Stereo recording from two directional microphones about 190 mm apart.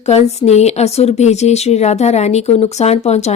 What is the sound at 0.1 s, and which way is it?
Speech, 35° left (ahead or behind).